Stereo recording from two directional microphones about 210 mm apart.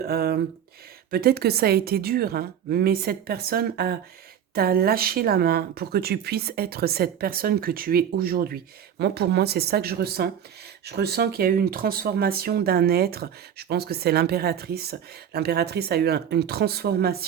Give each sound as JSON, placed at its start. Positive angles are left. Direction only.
{"t": 0.0, "sound": "speech", "side_deg": -45}